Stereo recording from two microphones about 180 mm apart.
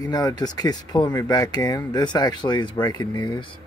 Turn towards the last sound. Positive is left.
turn(degrees=25)  # may be behind; listen again after turning